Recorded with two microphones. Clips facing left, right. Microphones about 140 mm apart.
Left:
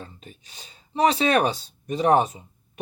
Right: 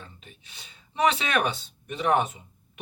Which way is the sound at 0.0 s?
40° left (ahead or behind).